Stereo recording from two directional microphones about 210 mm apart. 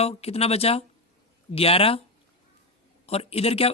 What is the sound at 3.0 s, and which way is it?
Speech, 30° left (ahead or behind).